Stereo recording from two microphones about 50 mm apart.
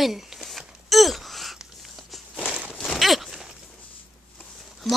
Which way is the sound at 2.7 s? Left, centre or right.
Centre.